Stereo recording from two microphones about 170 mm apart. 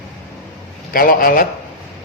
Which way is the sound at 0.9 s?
55° left (ahead or behind).